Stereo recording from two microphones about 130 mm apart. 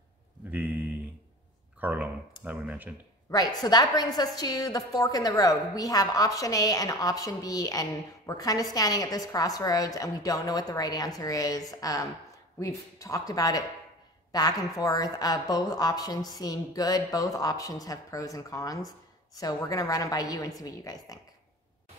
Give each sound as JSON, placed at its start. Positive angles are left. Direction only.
{"t": 0.5, "sound": "a sound", "side_deg": -10}
{"t": 1.8, "sound": "speech", "side_deg": -10}
{"t": 3.3, "sound": "a woman's voice", "side_deg": 30}